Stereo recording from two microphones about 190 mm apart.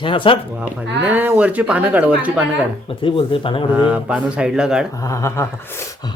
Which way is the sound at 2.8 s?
25° left (ahead or behind).